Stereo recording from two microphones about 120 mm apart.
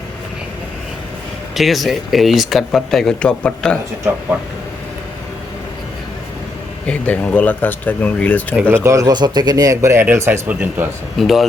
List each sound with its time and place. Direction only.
1.5 s speech: centre (ahead or behind)
6.8 s speech: 10° left (ahead or behind)
8.7 s speech: 25° right (ahead or behind)
11.2 s speech: centre (ahead or behind)